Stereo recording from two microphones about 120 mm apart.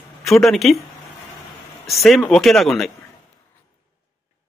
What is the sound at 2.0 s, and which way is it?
Speech, centre (ahead or behind).